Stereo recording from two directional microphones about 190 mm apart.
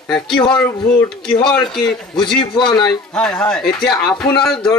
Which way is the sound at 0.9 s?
5° left (ahead or behind).